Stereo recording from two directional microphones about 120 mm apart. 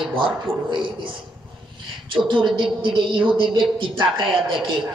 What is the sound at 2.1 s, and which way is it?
A woman's voice, 45° right (ahead or behind).